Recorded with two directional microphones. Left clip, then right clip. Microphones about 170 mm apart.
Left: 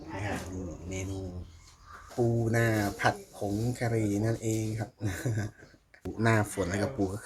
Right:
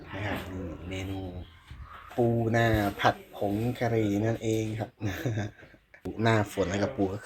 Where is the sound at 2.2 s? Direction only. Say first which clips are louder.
Right 3 dB; 15° right (ahead or behind).